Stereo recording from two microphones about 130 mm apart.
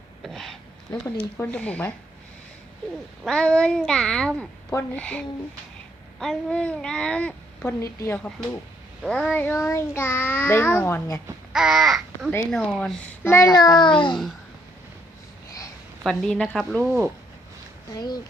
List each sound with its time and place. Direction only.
0.2 s a sound: centre (ahead or behind)
1.0 s a child's voice: 15° left (ahead or behind)
3.2 s a child's voice: 5° left (ahead or behind)
4.7 s a child's voice: 20° left (ahead or behind)
6.1 s a child's voice: 5° left (ahead or behind)
11.5 s a child's voice: 5° right (ahead or behind); by 14.2 s 35° left (ahead or behind)
16.0 s a child's voice: 5° left (ahead or behind)
17.9 s speech: 30° left (ahead or behind)